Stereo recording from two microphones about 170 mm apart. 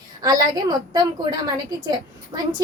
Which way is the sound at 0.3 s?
20° right (ahead or behind).